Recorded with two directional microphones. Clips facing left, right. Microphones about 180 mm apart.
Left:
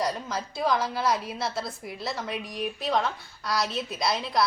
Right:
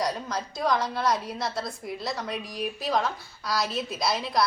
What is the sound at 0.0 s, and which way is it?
A woman's voice, centre (ahead or behind).